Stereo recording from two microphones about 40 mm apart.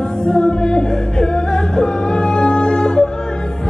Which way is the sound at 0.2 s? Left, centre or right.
Left.